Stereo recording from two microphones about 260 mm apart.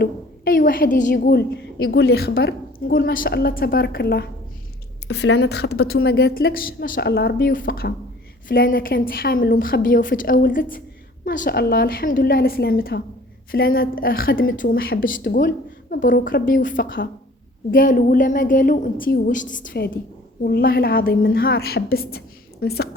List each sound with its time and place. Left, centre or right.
0.0 s a woman's voice: left